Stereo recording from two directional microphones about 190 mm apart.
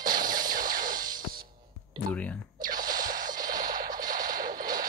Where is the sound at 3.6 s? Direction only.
45° right (ahead or behind).